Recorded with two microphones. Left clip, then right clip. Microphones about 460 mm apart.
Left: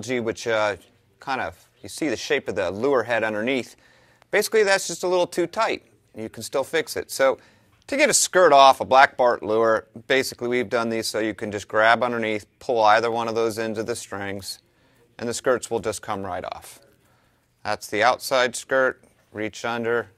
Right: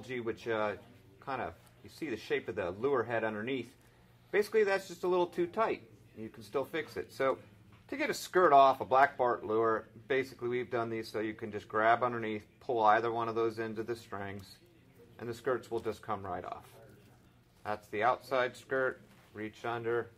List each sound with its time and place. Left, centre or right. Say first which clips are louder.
0.1 s speech: left 12 dB; left
17.6 s speech: left 11 dB; left